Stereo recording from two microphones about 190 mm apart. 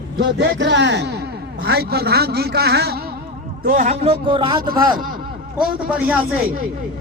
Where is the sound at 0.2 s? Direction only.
65° right (ahead or behind).